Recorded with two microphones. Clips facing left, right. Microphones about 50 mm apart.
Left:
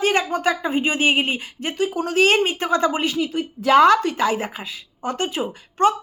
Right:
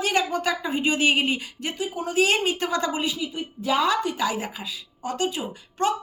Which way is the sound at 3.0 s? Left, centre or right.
Left.